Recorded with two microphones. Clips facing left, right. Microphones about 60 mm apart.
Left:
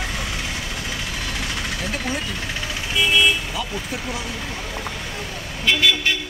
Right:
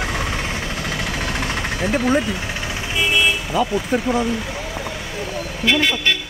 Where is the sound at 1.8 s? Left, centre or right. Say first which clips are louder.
Right 12 dB; right.